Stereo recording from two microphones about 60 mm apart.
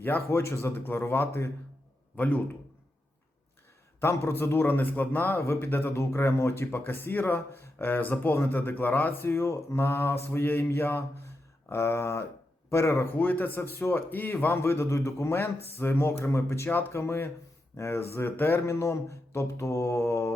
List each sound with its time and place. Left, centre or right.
0.0 s a man's voice: left
2.1 s a man's voice: left
4.0 s a man's voice: left
13.1 s a man's voice: left
13.6 s a man's voice: left